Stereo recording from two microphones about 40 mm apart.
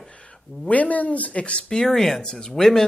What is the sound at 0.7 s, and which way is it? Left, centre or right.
Speech, left.